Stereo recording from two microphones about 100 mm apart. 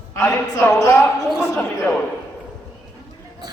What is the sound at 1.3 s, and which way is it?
Speech, 5° left (ahead or behind).